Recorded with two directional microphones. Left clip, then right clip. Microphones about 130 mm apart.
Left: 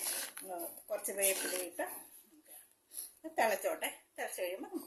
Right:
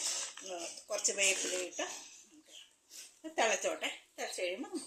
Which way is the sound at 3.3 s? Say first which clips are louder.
Even; 25° right (ahead or behind).